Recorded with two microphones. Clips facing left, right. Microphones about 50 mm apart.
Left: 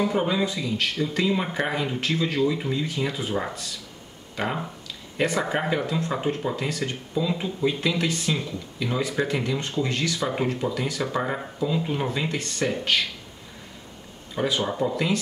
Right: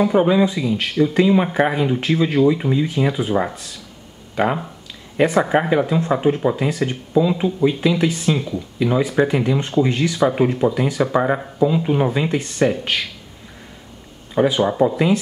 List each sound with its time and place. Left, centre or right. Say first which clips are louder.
0.0 s speech: right 8 dB; centre
4.4 s speech: right 8 dB; centre
14.3 s speech: right 8 dB; centre